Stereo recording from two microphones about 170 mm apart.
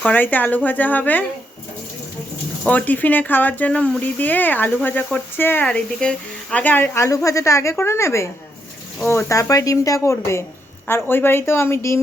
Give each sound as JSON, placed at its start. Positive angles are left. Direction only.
{"t": 0.0, "sound": "speech", "side_deg": 10}
{"t": 2.6, "sound": "speech", "side_deg": 10}